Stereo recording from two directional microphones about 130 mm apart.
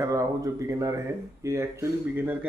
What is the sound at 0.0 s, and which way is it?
Speech, 25° right (ahead or behind).